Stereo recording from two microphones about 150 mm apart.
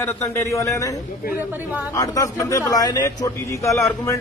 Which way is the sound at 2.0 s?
25° left (ahead or behind).